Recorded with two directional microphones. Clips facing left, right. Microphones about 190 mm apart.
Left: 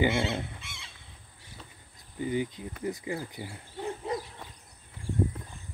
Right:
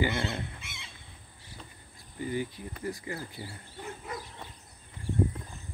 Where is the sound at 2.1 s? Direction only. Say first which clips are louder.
Left 3 dB; 15° left (ahead or behind).